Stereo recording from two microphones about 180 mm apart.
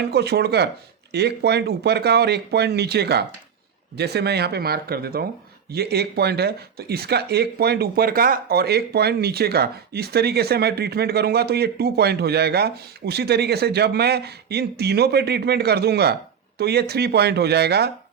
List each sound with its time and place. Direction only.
0.0 s speech: 65° right (ahead or behind)